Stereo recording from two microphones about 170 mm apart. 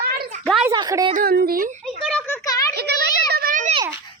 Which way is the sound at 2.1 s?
10° left (ahead or behind).